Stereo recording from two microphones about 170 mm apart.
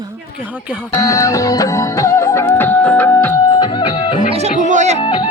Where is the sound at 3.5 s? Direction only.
25° left (ahead or behind).